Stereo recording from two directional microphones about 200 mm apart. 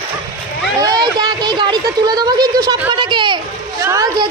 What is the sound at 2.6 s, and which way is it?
Speech, 20° right (ahead or behind).